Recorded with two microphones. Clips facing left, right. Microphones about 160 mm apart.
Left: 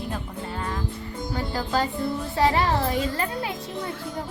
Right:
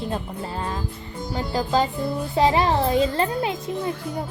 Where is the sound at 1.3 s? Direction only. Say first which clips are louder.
Right 4 dB; 15° right (ahead or behind).